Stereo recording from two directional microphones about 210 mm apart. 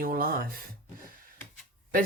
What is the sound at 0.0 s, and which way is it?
Speech, 45° right (ahead or behind).